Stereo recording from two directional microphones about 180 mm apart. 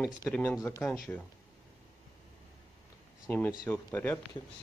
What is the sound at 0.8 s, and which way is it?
Speech, 5° left (ahead or behind).